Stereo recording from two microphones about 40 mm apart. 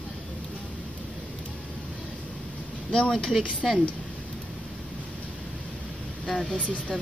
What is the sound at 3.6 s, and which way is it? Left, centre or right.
Speech, centre.